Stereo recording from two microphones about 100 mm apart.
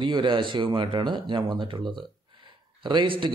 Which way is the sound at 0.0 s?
50° right (ahead or behind).